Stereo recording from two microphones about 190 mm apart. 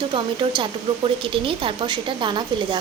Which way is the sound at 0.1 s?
25° right (ahead or behind).